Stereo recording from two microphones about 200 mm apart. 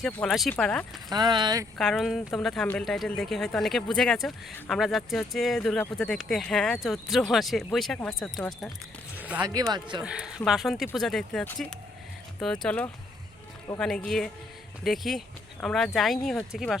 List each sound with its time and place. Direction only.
0.0 s speech: centre (ahead or behind)
1.1 s speech: 20° right (ahead or behind)
1.8 s speech: centre (ahead or behind)
9.1 s music: 5° right (ahead or behind)
9.5 s speech: 20° right (ahead or behind)
10.0 s speech: 5° right (ahead or behind)